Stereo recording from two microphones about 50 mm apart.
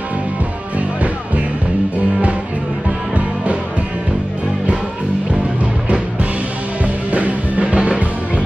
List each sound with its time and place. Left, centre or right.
0.7 s music: right
6.8 s music: right